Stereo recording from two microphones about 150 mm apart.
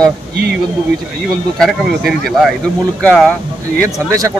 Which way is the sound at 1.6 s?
Centre (ahead or behind).